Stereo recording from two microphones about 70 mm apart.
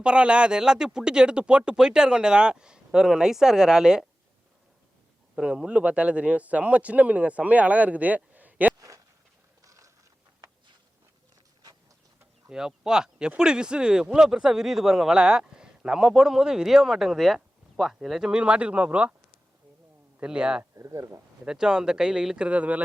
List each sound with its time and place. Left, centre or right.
0.0 s speech: centre
5.4 s speech: centre
9.6 s a sound: right
12.5 s speech: centre
18.3 s speech: centre
20.2 s speech: centre
20.7 s speech: right
21.4 s speech: centre